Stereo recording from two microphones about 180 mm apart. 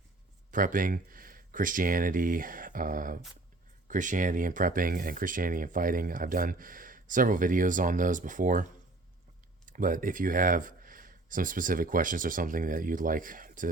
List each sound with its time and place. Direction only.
0.5 s speech: 50° right (ahead or behind)